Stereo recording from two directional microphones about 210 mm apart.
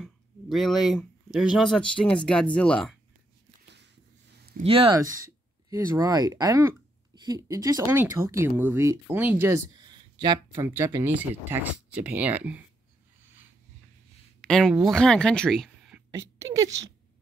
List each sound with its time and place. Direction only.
0.0 s speech: centre (ahead or behind)
3.6 s a sound: 55° right (ahead or behind)
4.6 s speech: 25° right (ahead or behind); by 9.6 s 10° right (ahead or behind)
9.8 s a sound: 20° right (ahead or behind)
10.7 s speech: 15° right (ahead or behind)
14.4 s speech: centre (ahead or behind)